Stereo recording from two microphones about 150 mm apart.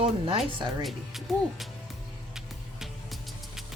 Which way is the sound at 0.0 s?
35° right (ahead or behind).